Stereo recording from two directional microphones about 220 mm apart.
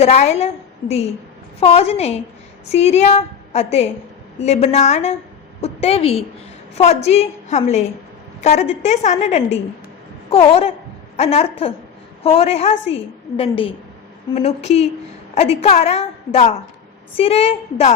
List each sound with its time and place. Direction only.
0.0 s a woman's voice: 30° left (ahead or behind)